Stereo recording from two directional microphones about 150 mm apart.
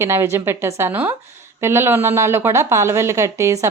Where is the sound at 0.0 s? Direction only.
20° right (ahead or behind).